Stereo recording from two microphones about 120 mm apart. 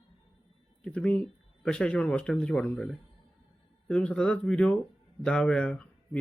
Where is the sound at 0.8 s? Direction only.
10° left (ahead or behind).